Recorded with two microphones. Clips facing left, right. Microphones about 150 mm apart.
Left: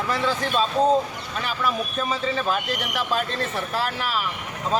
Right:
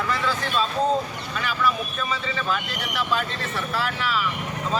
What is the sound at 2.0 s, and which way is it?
Speech, 40° left (ahead or behind).